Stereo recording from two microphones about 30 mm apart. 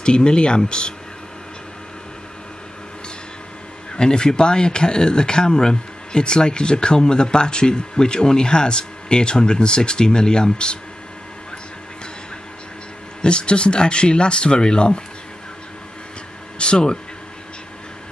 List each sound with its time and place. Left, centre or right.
0.0 s speech: left
3.9 s speech: left
13.2 s speech: left
16.5 s speech: left